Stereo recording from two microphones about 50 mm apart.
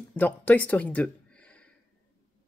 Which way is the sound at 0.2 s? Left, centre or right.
Left.